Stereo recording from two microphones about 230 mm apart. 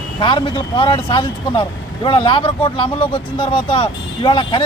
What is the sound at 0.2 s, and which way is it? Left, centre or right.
Speech, left.